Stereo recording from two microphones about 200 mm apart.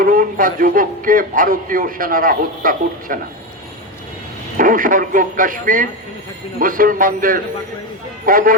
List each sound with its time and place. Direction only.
0.0 s a man's voice: 45° right (ahead or behind)
4.5 s a man's voice: 45° right (ahead or behind)